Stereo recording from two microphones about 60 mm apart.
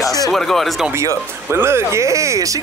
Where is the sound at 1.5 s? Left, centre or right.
Right.